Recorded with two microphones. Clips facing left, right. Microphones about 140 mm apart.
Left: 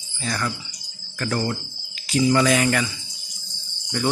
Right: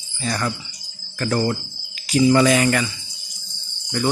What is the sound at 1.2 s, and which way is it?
Cricket, 30° right (ahead or behind).